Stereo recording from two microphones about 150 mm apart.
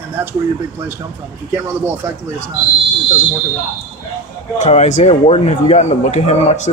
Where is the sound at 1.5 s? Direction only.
15° right (ahead or behind).